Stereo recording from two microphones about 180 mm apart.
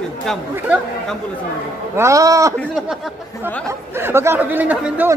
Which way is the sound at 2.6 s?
Centre (ahead or behind).